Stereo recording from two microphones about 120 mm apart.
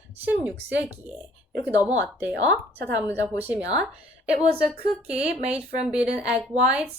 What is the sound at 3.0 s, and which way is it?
Speech, 25° left (ahead or behind).